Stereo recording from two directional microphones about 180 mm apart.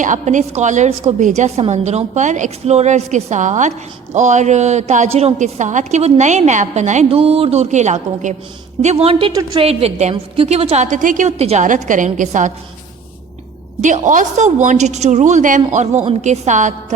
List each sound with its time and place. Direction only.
0.0 s a woman's voice: 45° right (ahead or behind)
13.8 s a woman's voice: 45° right (ahead or behind)